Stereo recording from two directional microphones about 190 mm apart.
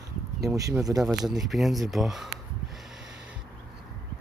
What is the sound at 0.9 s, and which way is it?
Speech, 5° left (ahead or behind).